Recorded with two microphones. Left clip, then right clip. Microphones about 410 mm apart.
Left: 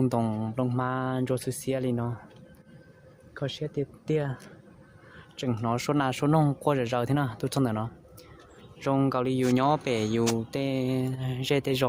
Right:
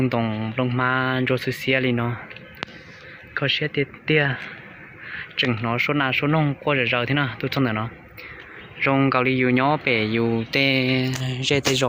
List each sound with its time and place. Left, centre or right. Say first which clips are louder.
0.0 s speech: right 4 dB; left
3.3 s speech: right 10 dB; left
5.4 s speech: right 8 dB; left